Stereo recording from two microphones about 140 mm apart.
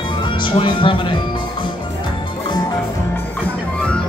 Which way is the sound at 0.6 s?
35° left (ahead or behind).